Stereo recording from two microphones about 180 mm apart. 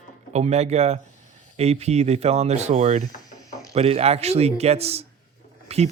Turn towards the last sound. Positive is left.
turn(degrees=-35)  # may be behind; listen again after turning